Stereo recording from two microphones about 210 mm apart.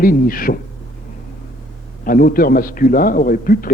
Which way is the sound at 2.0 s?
45° left (ahead or behind).